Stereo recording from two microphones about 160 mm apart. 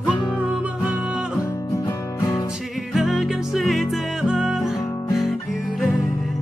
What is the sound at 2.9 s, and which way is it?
Music, centre (ahead or behind).